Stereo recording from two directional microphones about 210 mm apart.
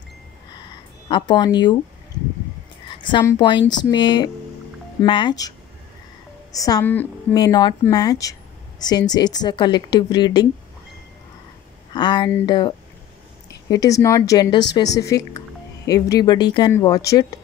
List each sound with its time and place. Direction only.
1.0 s a woman's voice: 20° left (ahead or behind)
3.0 s a woman's voice: 20° left (ahead or behind)
6.5 s a woman's voice: 15° left (ahead or behind)
11.9 s a woman's voice: 20° left (ahead or behind)